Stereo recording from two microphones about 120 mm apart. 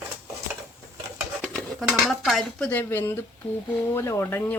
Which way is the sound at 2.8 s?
20° left (ahead or behind).